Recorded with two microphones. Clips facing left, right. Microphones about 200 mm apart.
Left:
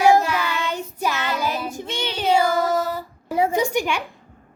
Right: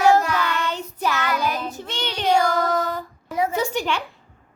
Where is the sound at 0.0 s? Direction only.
10° left (ahead or behind).